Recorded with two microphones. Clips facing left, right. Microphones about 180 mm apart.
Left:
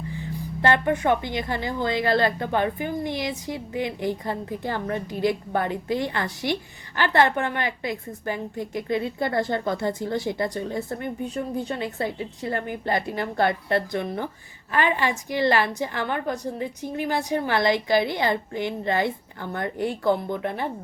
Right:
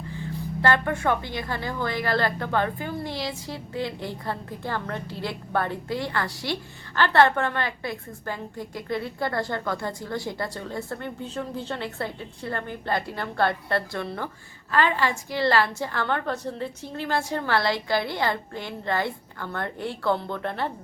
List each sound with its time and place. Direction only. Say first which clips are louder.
0.1 s a woman's voice: even; 20° left (ahead or behind)